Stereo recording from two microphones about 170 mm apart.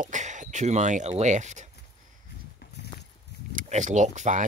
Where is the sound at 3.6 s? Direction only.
45° right (ahead or behind).